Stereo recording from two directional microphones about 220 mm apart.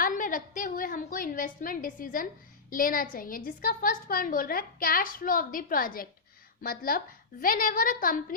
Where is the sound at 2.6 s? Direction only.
40° left (ahead or behind).